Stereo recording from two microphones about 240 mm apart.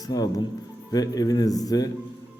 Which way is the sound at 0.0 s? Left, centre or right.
Centre.